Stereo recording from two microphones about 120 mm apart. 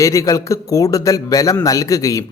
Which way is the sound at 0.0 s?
25° left (ahead or behind).